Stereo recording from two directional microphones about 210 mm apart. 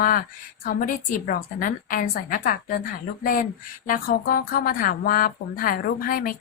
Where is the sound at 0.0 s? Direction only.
45° left (ahead or behind).